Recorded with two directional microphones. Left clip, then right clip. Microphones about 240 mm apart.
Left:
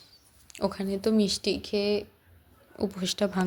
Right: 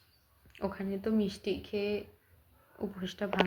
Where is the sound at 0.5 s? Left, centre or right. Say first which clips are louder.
Left 7 dB; left.